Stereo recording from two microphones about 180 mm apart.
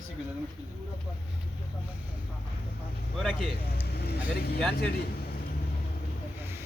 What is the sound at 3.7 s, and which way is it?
Speech, 60° left (ahead or behind).